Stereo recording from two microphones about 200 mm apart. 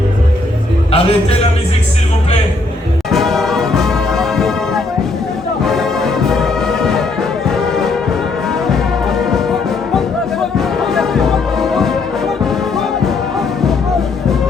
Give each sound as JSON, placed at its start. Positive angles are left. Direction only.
{"t": 0.9, "sound": "a man's voice", "side_deg": 30}
{"t": 3.1, "sound": "music", "side_deg": 0}